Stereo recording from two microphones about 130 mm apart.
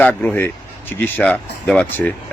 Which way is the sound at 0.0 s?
15° left (ahead or behind).